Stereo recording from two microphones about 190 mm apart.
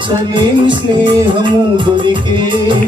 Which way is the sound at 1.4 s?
25° right (ahead or behind).